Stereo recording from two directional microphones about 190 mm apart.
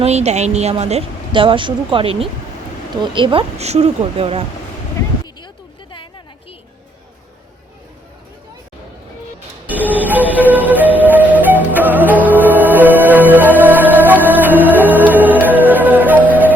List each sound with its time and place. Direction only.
0.0 s a woman's voice: 35° right (ahead or behind)
9.6 s music: 10° right (ahead or behind)